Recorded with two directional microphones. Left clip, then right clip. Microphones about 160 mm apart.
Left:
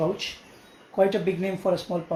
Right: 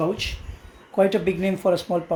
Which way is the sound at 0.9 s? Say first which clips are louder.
Right 2 dB; 70° right (ahead or behind).